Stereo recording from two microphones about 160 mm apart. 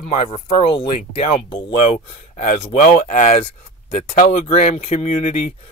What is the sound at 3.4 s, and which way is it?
Speech, 35° left (ahead or behind).